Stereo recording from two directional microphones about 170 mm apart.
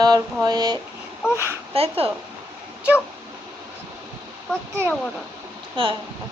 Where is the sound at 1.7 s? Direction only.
35° right (ahead or behind).